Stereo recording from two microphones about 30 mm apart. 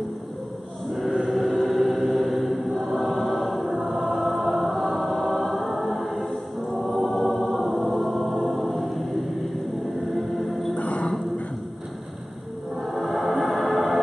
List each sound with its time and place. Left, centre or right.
1.4 s music: centre
3.8 s choir: centre
4.7 s music: centre
5.1 s choir: centre
10.8 s music: left
13.1 s music: centre